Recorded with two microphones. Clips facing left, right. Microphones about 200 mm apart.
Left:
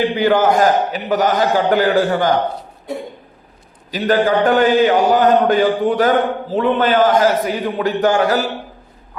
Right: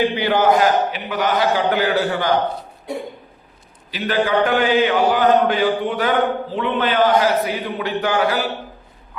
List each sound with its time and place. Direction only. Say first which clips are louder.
0.2 s a man's voice: left 4 dB; 50° left (ahead or behind)
3.9 s a man's voice: left 4 dB; 45° left (ahead or behind)